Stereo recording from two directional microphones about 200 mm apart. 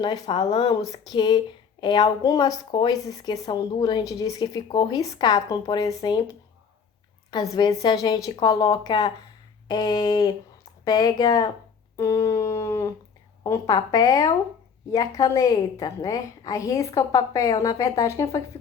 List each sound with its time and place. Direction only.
0.0 s a woman's voice: 20° left (ahead or behind)
7.5 s a woman's voice: 20° left (ahead or behind)